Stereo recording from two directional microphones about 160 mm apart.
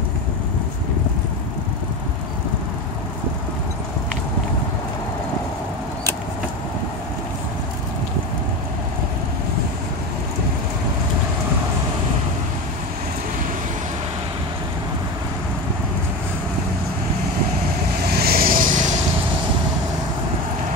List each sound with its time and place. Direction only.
18.1 s vehicle: 75° right (ahead or behind); by 18.9 s 55° right (ahead or behind)